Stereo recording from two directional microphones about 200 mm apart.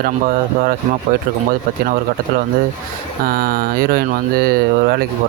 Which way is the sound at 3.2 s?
50° right (ahead or behind).